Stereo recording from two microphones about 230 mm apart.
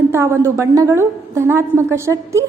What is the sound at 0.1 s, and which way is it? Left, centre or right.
A woman's voice, centre.